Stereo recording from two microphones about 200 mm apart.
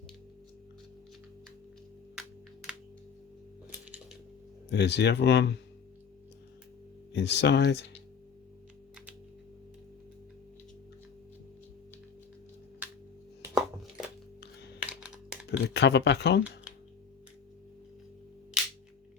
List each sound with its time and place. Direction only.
4.7 s speech: 60° left (ahead or behind)
7.1 s speech: 60° left (ahead or behind)
13.4 s a sound: centre (ahead or behind)
14.8 s computer keyboard: 5° right (ahead or behind)
15.7 s speech: 60° left (ahead or behind)